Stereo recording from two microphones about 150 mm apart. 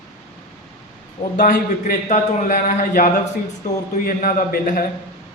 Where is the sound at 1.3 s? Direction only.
65° left (ahead or behind).